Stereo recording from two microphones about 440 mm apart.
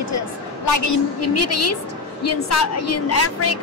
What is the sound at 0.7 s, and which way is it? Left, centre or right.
A woman's voice, left.